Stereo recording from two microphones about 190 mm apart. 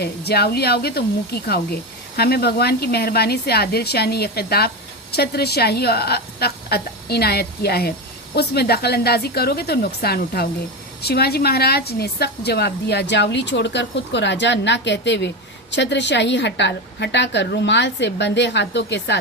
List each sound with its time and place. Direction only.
0.0 s speech: 55° left (ahead or behind)